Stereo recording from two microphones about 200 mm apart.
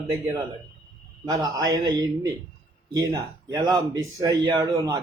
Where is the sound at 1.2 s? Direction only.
20° right (ahead or behind).